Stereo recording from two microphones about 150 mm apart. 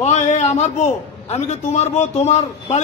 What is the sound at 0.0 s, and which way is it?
A man's voice, 50° left (ahead or behind).